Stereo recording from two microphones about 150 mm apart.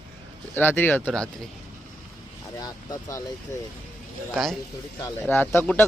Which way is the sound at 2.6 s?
25° left (ahead or behind).